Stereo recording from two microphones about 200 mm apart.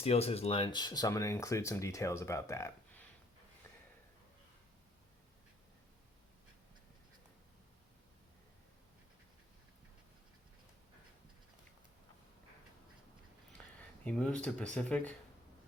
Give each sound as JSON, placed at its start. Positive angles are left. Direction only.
{"t": 0.0, "sound": "speech", "side_deg": 30}
{"t": 14.0, "sound": "speech", "side_deg": 5}